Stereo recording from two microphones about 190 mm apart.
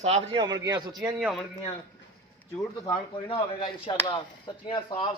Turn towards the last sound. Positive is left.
turn(degrees=25)  # may be behind; listen again after turning